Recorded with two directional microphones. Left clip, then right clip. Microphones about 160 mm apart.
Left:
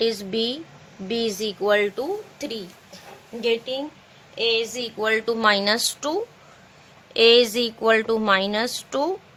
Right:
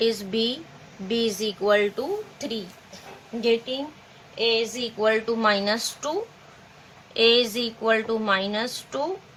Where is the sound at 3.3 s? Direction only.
85° left.